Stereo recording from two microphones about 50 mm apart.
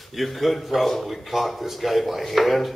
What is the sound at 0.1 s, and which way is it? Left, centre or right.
Speech, centre.